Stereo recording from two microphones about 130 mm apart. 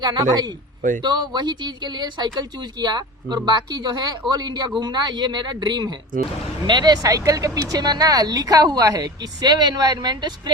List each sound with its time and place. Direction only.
0.0 s speech: 30° right (ahead or behind)
0.8 s speech: 90° right
1.0 s speech: 30° right (ahead or behind)
6.1 s speech: 90° right
6.7 s speech: 35° right (ahead or behind)